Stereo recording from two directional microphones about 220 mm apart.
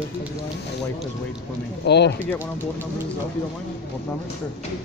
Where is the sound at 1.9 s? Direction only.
50° left (ahead or behind).